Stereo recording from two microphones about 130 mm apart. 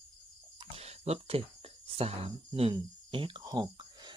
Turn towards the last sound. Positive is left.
turn(degrees=-35)  # may be behind; listen again after turning